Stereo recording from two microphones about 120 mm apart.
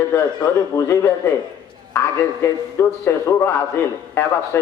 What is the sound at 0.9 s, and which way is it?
Speech, 20° left (ahead or behind).